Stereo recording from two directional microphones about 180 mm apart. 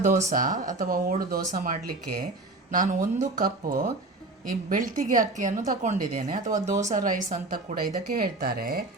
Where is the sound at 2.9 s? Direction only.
40° right (ahead or behind).